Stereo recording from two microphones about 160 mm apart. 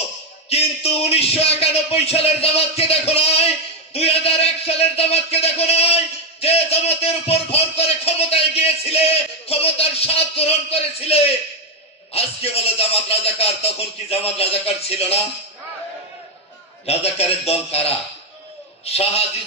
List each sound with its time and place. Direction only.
0.5 s a man's voice: 40° left (ahead or behind)
16.8 s a man's voice: 40° left (ahead or behind)